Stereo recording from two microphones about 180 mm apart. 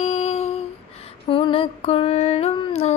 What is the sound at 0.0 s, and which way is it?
Humming, 40° left (ahead or behind).